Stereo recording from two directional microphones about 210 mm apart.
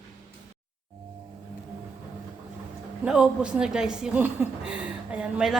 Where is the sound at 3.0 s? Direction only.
5° right (ahead or behind).